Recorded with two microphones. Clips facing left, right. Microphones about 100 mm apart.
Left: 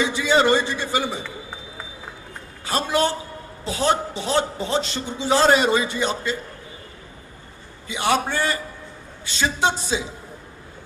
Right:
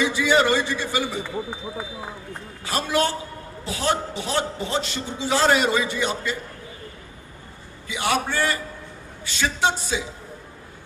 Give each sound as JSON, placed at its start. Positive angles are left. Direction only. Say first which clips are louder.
{"t": 0.0, "sound": "a man's voice", "louder": "left 1 dB", "side_deg": 20}
{"t": 2.6, "sound": "a man's voice", "louder": "left 1 dB", "side_deg": 20}
{"t": 7.9, "sound": "a man's voice", "louder": "left 2 dB", "side_deg": 20}